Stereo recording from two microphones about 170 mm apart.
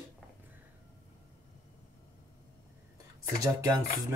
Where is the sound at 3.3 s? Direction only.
20° right (ahead or behind).